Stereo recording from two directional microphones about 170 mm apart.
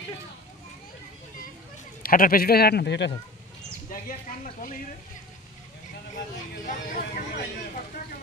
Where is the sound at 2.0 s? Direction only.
60° left (ahead or behind); by 3.1 s 80° left.